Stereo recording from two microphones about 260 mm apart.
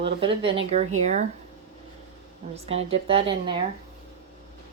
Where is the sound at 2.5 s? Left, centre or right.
Right.